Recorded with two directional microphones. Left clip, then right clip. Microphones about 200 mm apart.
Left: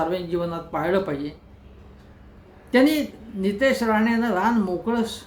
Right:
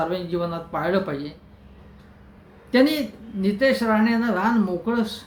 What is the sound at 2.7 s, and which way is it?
Speech, 5° left (ahead or behind).